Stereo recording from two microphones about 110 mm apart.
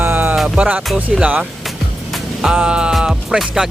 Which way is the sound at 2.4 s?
10° right (ahead or behind).